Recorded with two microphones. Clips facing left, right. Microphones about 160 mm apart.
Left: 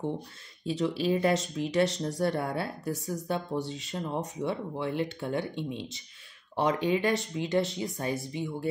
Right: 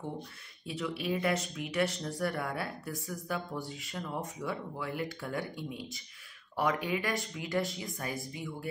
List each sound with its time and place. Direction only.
0.7 s speech: 30° left (ahead or behind)